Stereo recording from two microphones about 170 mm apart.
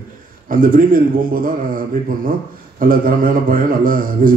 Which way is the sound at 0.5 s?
55° right (ahead or behind).